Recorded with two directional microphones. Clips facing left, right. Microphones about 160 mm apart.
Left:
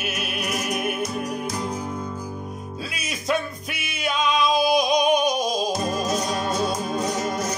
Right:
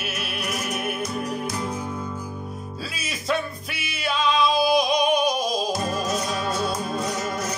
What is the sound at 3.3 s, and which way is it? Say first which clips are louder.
Music: left 1 dB; 50° left (ahead or behind).